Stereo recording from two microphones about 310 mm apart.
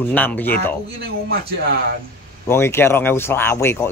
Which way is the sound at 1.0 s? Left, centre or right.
Right.